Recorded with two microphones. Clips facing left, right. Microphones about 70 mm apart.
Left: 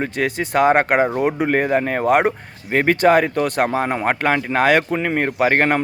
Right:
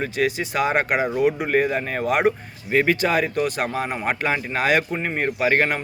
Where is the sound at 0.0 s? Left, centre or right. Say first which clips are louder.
Left 1 dB; left.